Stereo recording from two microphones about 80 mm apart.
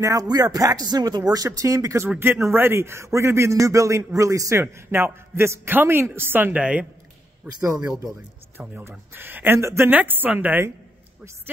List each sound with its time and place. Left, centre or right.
0.0 s speech: right
2.0 s a man's voice: right